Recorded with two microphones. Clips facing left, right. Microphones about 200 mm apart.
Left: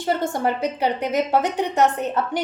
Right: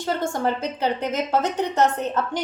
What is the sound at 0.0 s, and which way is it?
A woman's voice, 15° left (ahead or behind).